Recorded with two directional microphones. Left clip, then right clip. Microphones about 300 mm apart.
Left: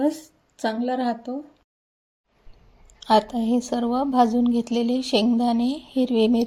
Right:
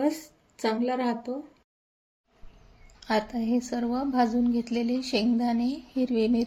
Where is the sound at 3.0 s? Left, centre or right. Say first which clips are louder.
Left 8 dB; left.